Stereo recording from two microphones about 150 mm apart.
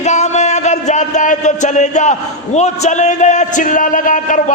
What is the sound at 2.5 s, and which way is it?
A man's voice, 50° left (ahead or behind).